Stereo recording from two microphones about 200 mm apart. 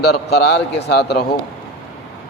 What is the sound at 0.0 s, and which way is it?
Speech, 55° left (ahead or behind).